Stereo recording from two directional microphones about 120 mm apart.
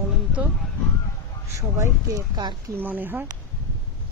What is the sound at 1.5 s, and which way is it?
Speech, 25° right (ahead or behind).